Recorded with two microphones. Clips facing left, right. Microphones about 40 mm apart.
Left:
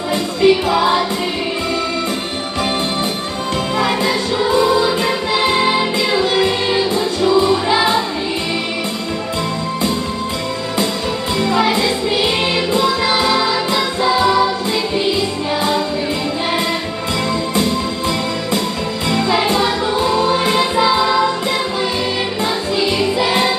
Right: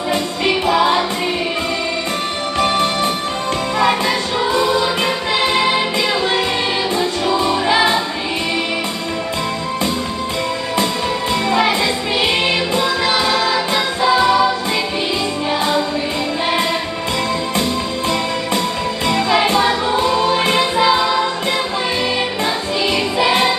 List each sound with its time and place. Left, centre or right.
0.4 s music: centre
7.3 s music: centre
11.5 s music: right
12.8 s music: centre
22.9 s music: right